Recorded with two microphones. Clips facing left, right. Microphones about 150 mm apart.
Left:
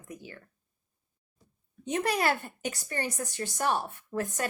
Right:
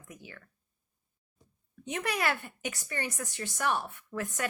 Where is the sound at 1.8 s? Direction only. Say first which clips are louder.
Left 4 dB; 35° left (ahead or behind).